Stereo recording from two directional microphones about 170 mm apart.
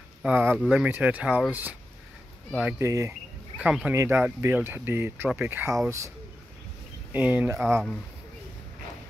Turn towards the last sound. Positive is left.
turn(degrees=-10)  # may be behind; listen again after turning